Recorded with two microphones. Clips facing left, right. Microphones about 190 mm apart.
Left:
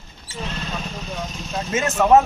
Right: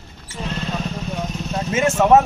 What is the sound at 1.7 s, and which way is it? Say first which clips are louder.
Speech: right 4 dB; 25° right (ahead or behind).